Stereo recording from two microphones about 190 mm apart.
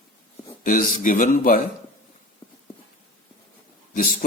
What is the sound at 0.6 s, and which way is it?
Speech, 45° left (ahead or behind).